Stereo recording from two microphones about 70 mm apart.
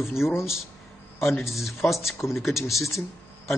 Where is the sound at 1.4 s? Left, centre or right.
Centre.